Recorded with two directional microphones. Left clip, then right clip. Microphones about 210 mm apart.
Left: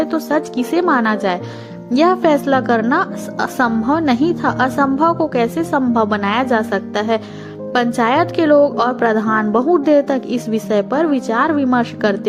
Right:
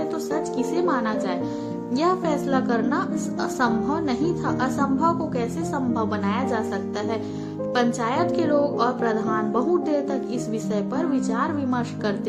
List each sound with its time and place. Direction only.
0.1 s a woman's voice: 35° left (ahead or behind)